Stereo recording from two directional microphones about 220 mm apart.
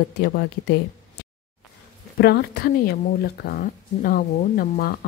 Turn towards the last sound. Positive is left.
turn(degrees=40)  # may be behind; listen again after turning